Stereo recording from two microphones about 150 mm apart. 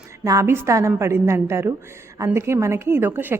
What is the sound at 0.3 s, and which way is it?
A woman's voice, 20° right (ahead or behind).